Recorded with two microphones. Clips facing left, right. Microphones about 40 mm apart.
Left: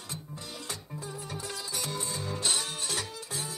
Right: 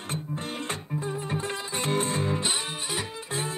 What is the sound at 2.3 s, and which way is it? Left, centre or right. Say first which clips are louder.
Music: right 3 dB; right.